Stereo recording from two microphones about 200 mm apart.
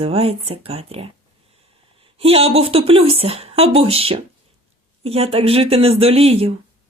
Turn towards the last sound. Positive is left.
turn(degrees=-30)  # may be behind; listen again after turning